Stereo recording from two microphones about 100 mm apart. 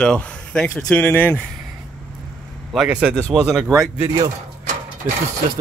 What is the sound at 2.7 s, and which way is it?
Speech, 5° right (ahead or behind).